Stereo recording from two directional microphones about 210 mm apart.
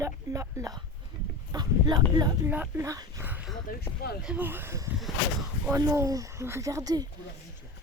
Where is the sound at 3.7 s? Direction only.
50° left (ahead or behind).